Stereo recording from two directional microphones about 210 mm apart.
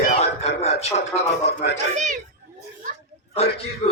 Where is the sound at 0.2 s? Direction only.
30° left (ahead or behind).